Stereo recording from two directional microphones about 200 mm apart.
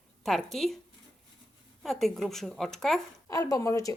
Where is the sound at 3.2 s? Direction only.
15° left (ahead or behind).